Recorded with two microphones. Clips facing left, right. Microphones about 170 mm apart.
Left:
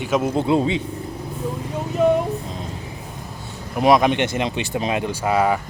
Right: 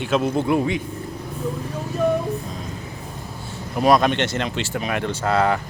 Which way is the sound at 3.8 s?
15° left (ahead or behind).